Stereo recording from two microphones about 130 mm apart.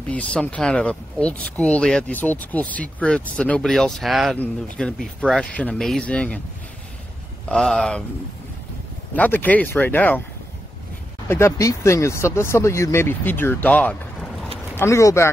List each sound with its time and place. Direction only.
0.1 s speech: 10° left (ahead or behind)
7.4 s speech: 5° left (ahead or behind)
9.1 s speech: 15° left (ahead or behind)
11.2 s speech: 20° left (ahead or behind)
14.8 s speech: 20° left (ahead or behind)